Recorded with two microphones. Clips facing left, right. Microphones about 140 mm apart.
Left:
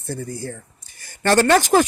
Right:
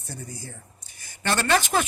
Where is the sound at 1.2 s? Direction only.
45° left (ahead or behind).